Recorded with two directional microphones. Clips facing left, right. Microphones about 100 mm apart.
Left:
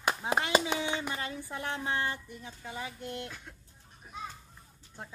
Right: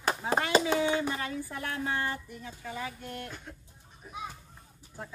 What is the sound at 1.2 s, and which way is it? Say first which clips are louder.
Speech: right 1 dB; 20° left (ahead or behind).